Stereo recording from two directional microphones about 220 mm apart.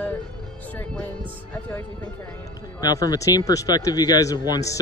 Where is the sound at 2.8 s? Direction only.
15° left (ahead or behind).